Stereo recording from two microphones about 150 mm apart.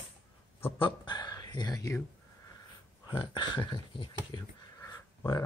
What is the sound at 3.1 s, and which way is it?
Speech, 30° left (ahead or behind).